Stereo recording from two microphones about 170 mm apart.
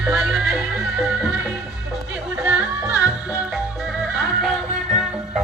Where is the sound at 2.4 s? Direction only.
10° right (ahead or behind).